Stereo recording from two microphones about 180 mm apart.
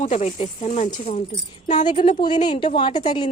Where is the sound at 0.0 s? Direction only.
40° left (ahead or behind); by 3.2 s 25° left (ahead or behind).